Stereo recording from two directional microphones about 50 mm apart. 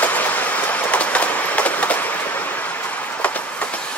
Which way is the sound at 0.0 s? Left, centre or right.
Left.